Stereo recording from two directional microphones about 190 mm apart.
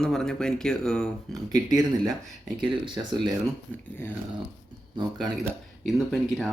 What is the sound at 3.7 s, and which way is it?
Speech, 5° left (ahead or behind).